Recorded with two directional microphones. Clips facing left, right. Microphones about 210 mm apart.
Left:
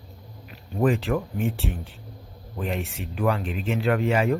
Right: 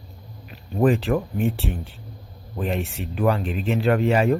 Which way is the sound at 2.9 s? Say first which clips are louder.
Right 3 dB; 35° right (ahead or behind).